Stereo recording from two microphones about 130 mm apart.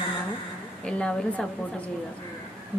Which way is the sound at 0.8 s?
10° left (ahead or behind).